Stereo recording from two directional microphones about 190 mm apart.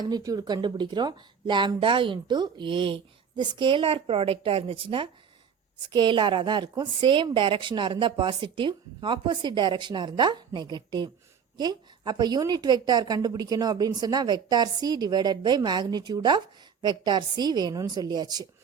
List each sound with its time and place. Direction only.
0.0 s a woman's voice: 20° right (ahead or behind)